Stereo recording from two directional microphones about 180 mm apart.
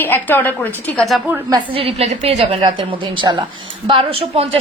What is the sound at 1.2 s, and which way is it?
Speech, 10° right (ahead or behind).